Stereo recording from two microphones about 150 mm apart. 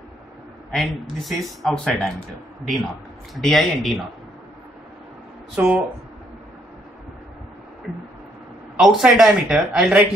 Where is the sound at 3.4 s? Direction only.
Centre (ahead or behind).